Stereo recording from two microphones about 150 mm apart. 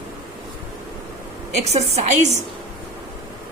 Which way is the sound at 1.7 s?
50° right (ahead or behind).